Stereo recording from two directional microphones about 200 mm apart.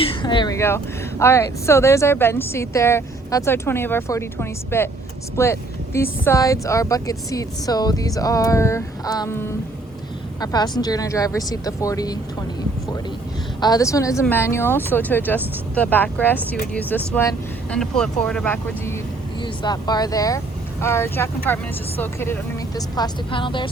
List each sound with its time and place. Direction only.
0.0 s speech: 25° left (ahead or behind)
13.6 s speech: 20° left (ahead or behind)
19.4 s speech: 20° left (ahead or behind)